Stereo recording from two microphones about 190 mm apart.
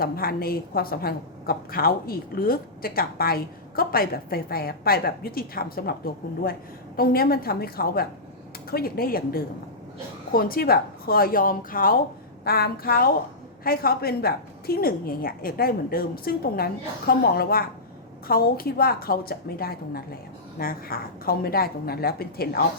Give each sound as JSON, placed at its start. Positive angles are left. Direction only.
{"t": 0.0, "sound": "a woman's voice", "side_deg": 50}